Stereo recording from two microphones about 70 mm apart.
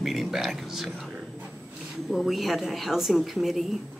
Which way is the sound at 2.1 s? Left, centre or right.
Centre.